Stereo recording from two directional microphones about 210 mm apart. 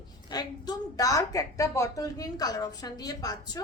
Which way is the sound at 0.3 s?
20° left (ahead or behind).